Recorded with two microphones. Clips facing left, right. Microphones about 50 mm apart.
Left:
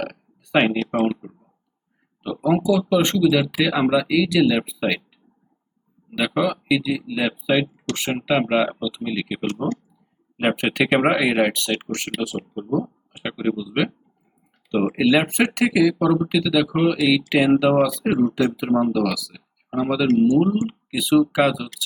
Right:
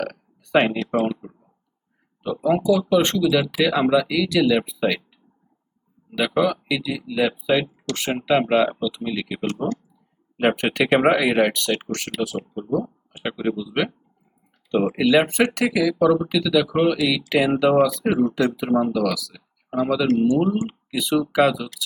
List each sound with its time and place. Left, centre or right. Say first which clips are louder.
0.0 s a sound: right 1 dB; centre
0.9 s speech: even; centre
2.2 s speech: even; centre
6.1 s speech: right 1 dB; centre
10.6 s speech: left 1 dB; centre
16.8 s speech: even; centre
17.1 s speech: left 3 dB; centre